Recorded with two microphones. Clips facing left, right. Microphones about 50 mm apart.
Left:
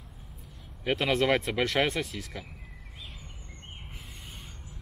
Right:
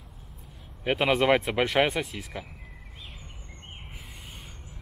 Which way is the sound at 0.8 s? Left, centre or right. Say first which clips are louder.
Right 3 dB; centre.